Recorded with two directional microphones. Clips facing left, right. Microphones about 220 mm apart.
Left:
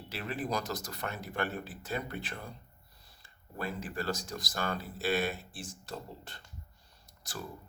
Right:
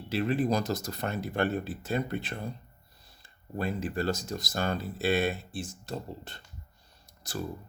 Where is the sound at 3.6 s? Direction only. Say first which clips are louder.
Right 6 dB; 25° right (ahead or behind).